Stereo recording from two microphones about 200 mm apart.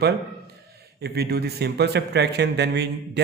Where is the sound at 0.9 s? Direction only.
55° right (ahead or behind).